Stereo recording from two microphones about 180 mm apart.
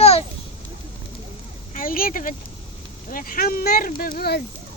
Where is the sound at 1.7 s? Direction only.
50° left (ahead or behind).